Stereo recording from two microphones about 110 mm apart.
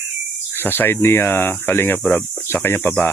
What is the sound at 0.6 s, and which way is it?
Speech, 20° left (ahead or behind).